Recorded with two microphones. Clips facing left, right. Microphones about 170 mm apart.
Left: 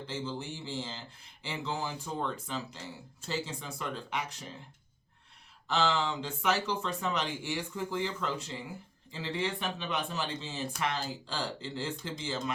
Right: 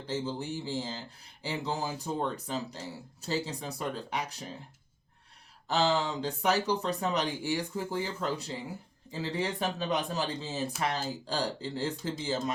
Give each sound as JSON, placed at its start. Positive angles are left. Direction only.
{"t": 0.1, "sound": "speech", "side_deg": -40}
{"t": 5.6, "sound": "speech", "side_deg": -35}